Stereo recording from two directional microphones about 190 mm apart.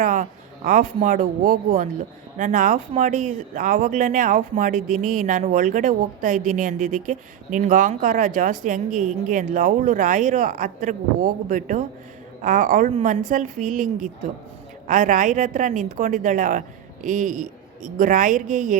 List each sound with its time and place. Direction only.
0.0 s speech: 45° right (ahead or behind)